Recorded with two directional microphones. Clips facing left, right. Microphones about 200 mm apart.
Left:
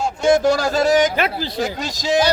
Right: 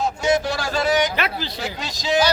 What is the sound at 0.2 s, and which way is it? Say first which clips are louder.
Speech: left 9 dB; 50° left (ahead or behind).